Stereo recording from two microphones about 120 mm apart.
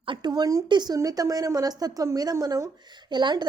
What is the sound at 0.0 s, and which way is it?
A woman's voice, 40° right (ahead or behind).